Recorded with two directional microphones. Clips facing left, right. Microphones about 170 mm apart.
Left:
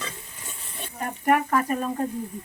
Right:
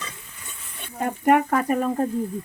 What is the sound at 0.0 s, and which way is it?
Stir, 35° left (ahead or behind).